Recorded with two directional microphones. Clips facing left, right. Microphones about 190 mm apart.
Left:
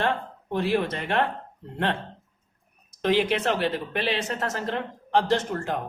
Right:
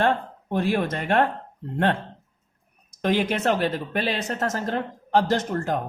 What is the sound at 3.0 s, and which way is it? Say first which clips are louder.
Speech: even; 45° right (ahead or behind).